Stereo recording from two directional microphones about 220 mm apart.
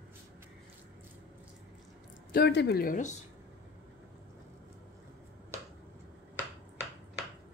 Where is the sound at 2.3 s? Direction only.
50° left (ahead or behind).